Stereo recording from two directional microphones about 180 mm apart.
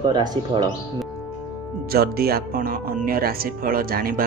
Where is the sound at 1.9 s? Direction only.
60° right (ahead or behind).